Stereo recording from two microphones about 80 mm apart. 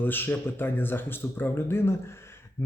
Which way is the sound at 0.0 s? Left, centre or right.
Left.